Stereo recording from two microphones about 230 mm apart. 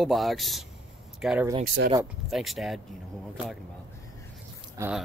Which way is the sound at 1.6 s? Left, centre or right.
Right.